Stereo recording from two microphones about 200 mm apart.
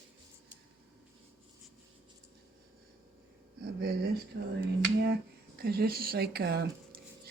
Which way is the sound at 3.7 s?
50° right (ahead or behind).